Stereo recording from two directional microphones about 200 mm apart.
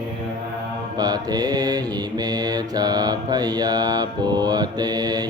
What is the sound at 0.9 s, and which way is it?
Mantra, 20° right (ahead or behind).